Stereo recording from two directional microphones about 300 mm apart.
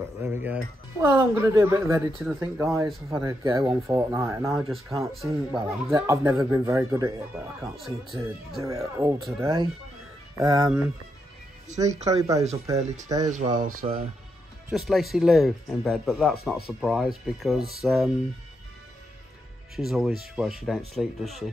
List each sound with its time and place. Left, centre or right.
0.0 s speech: centre
11.9 s speech: right
12.2 s speech: centre
13.3 s speech: right
14.7 s speech: centre
19.7 s speech: centre